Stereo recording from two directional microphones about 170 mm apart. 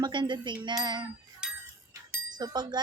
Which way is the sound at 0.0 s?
25° right (ahead or behind).